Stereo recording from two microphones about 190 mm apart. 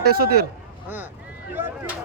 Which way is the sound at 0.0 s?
55° right (ahead or behind).